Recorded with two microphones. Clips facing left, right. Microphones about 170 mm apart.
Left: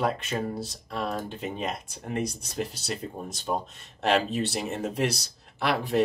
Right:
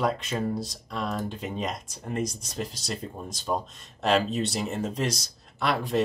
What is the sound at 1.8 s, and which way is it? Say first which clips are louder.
Speech: even; 60° left (ahead or behind).